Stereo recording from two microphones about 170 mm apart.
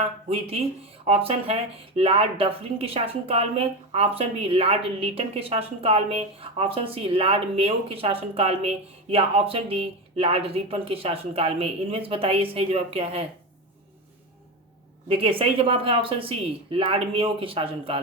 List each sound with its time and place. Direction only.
0.0 s a woman's voice: 35° right (ahead or behind)
15.1 s a woman's voice: 35° right (ahead or behind)